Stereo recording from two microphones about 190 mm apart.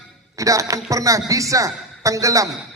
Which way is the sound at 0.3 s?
15° right (ahead or behind).